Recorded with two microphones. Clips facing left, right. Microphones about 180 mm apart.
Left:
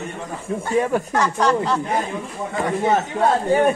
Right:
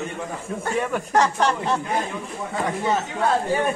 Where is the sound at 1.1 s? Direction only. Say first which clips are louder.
Left 1 dB; 30° right (ahead or behind).